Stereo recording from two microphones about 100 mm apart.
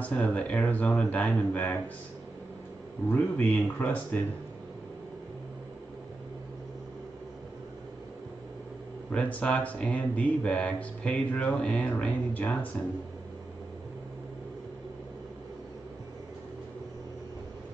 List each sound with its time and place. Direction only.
0.0 s speech: 15° left (ahead or behind)
3.1 s speech: 15° left (ahead or behind)
9.1 s speech: 10° left (ahead or behind)